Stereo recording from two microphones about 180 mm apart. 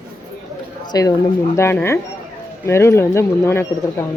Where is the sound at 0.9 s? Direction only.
20° left (ahead or behind).